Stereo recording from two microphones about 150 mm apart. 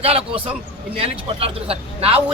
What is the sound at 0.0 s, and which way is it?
A man's voice, 40° right (ahead or behind).